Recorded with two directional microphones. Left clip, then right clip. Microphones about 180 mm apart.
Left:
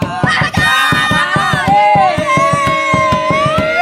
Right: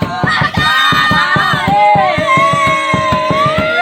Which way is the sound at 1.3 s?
20° left (ahead or behind).